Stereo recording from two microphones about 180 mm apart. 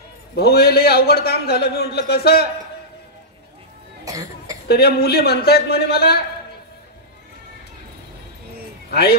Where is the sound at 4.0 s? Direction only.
20° right (ahead or behind).